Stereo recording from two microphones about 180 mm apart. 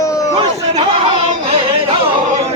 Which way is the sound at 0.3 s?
35° right (ahead or behind).